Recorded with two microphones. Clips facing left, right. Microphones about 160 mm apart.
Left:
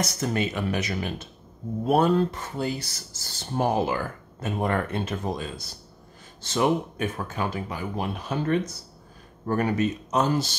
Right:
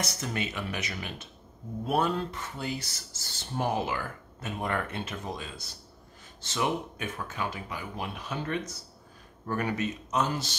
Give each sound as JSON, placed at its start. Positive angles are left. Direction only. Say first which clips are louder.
{"t": 0.2, "sound": "speech", "louder": "left 7 dB", "side_deg": 40}